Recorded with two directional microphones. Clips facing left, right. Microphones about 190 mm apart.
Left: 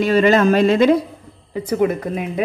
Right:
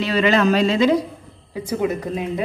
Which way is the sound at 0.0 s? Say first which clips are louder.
Left 4 dB; 45° left (ahead or behind).